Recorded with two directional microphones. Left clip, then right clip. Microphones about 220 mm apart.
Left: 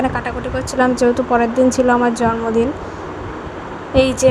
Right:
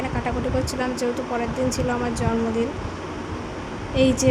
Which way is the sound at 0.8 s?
30° left (ahead or behind).